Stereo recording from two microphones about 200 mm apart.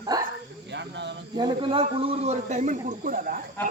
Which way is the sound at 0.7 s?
60° right (ahead or behind).